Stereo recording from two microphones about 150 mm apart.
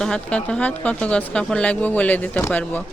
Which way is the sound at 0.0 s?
5° left (ahead or behind).